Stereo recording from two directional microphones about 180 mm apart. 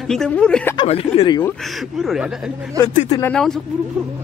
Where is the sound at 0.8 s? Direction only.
30° left (ahead or behind).